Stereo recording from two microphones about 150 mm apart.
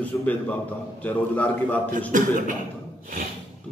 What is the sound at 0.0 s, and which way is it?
A man's voice, 10° left (ahead or behind).